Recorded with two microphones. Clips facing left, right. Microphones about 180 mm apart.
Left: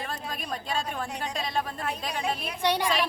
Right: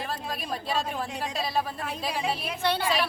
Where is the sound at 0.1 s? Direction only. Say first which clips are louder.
Right 2 dB; 5° right (ahead or behind).